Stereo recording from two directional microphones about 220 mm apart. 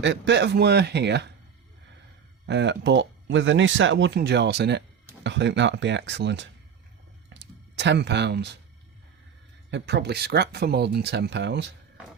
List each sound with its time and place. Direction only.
0.0 s speech: 55° right (ahead or behind)
2.5 s speech: 50° right (ahead or behind)
7.3 s a sound: 55° right (ahead or behind)
7.8 s speech: 50° right (ahead or behind)
9.6 s speech: 50° right (ahead or behind)